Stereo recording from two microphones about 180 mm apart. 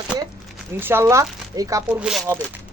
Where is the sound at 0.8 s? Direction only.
10° right (ahead or behind).